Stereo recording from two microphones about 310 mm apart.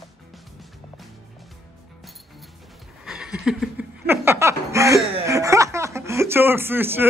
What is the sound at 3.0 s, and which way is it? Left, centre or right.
Laughter, centre.